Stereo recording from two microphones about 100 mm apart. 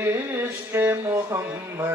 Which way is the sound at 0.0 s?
25° right (ahead or behind).